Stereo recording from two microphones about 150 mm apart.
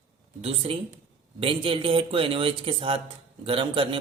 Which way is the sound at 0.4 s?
40° right (ahead or behind).